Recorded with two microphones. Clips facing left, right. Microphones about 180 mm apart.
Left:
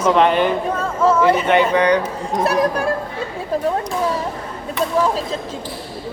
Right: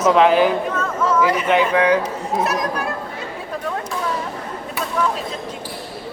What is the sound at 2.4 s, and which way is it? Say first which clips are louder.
Speech: left 5 dB; 30° left (ahead or behind).